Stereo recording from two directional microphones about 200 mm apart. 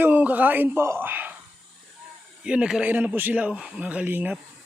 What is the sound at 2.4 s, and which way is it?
Speech, 5° right (ahead or behind).